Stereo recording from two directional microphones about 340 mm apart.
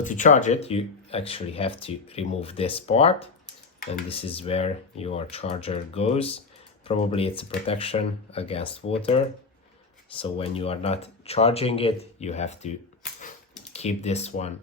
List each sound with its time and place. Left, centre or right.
0.0 s speech: left
13.7 s speech: centre